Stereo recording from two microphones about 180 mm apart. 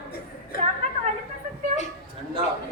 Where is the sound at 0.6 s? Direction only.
40° right (ahead or behind).